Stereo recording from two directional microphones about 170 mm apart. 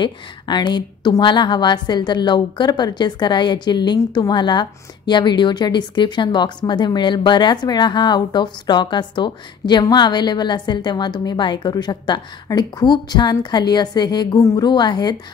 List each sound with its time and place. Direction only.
0.0 s a woman's voice: 25° left (ahead or behind)